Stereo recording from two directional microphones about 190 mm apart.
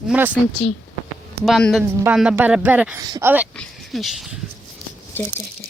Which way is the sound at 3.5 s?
5° left (ahead or behind).